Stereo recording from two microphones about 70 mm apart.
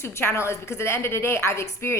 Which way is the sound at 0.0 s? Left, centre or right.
Left.